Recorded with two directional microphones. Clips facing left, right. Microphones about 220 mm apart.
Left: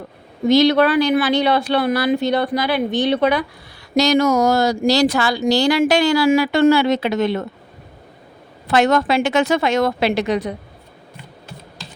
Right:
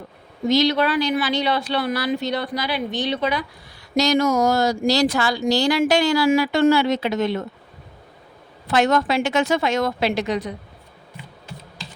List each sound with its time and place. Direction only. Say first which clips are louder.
0.4 s a woman's voice: left 5 dB; 55° left (ahead or behind)
3.9 s speech: left 3 dB; 70° left (ahead or behind)
8.7 s speech: left 3 dB; 65° left (ahead or behind)